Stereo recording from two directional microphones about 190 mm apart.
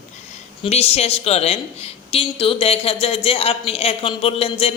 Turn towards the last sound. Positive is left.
turn(degrees=30)  # may be behind; listen again after turning